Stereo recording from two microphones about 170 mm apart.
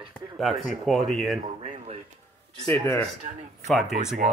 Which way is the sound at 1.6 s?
40° right (ahead or behind).